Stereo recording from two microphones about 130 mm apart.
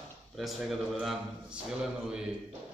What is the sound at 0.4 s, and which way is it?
A man's voice, centre (ahead or behind).